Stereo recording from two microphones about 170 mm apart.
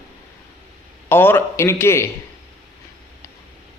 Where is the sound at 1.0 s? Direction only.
15° left (ahead or behind).